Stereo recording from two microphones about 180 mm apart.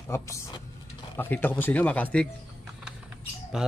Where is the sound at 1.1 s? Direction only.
10° left (ahead or behind).